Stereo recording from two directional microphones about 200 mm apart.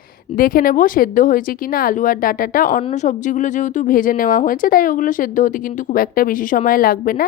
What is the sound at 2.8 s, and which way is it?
Speech, 35° left (ahead or behind).